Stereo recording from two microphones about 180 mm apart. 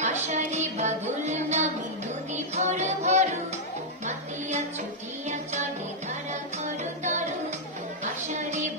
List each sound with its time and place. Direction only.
0.0 s child singing: 40° right (ahead or behind)
2.3 s music: 40° right (ahead or behind)
5.3 s music: 40° right (ahead or behind)